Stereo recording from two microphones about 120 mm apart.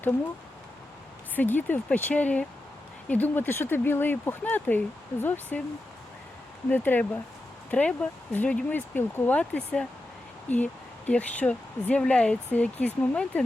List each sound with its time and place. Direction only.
1.4 s speech: 15° left (ahead or behind)
6.7 s speech: 15° left (ahead or behind)